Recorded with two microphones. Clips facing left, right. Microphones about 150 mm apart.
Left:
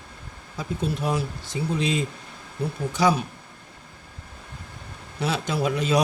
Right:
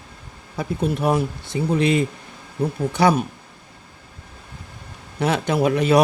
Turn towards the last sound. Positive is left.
turn(degrees=-60)  # may be behind; listen again after turning